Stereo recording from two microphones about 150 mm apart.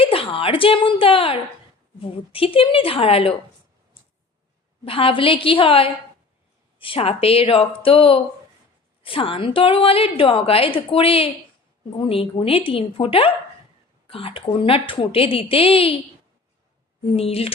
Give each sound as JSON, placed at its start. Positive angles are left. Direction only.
{"t": 0.0, "sound": "a woman's voice", "side_deg": 35}
{"t": 4.9, "sound": "a woman's voice", "side_deg": 35}
{"t": 17.2, "sound": "a woman's voice", "side_deg": 40}